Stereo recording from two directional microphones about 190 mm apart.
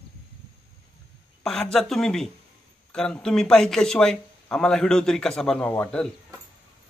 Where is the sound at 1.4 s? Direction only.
5° left (ahead or behind).